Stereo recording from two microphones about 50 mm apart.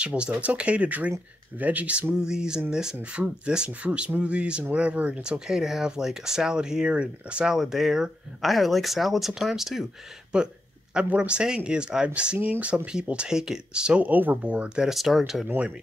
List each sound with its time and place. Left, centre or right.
0.0 s speech: right
2.1 s speech: centre
5.2 s speech: centre
7.5 s speech: centre
10.3 s a sound: centre
11.1 s speech: centre
12.4 s speech: right
13.1 s speech: centre
14.0 s speech: right
14.8 s speech: centre